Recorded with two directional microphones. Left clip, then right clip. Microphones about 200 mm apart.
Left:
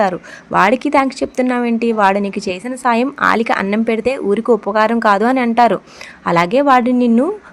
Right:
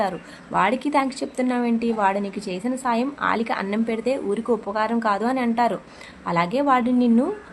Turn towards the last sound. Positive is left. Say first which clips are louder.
# left 7 dB
turn(degrees=35)  # may be behind; listen again after turning